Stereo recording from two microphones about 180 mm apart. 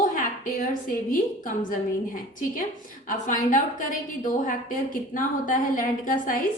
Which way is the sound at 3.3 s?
45° left (ahead or behind).